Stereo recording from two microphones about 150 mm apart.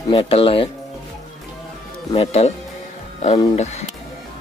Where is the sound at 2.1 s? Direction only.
45° left (ahead or behind).